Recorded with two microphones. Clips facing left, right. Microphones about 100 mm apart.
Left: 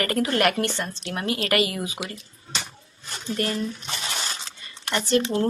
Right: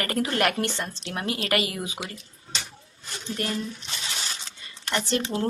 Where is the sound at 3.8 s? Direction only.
55° left (ahead or behind).